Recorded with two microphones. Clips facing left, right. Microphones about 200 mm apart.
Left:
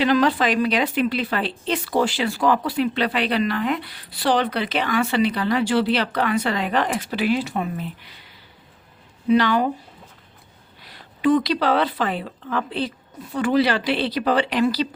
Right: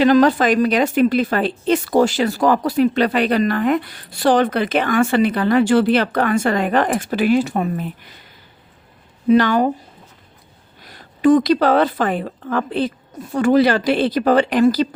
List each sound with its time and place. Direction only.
0.0 s a woman's voice: 45° right (ahead or behind)
10.8 s a woman's voice: 45° right (ahead or behind)